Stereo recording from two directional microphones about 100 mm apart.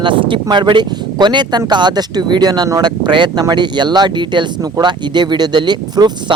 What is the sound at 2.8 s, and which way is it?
Speech, 50° right (ahead or behind).